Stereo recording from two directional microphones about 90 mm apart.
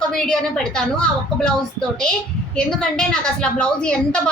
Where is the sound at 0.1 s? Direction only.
5° left (ahead or behind).